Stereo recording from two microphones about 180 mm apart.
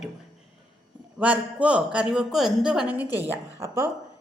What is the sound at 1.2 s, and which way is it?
A woman's voice, 5° right (ahead or behind).